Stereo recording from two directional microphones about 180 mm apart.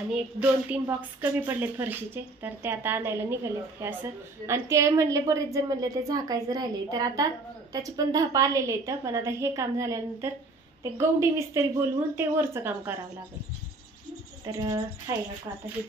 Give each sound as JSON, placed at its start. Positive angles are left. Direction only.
{"t": 0.1, "sound": "a woman's voice", "side_deg": -5}
{"t": 4.5, "sound": "a woman's voice", "side_deg": -15}
{"t": 14.4, "sound": "a woman's voice", "side_deg": -20}